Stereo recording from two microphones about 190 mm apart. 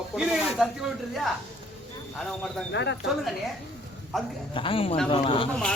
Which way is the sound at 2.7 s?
70° left (ahead or behind).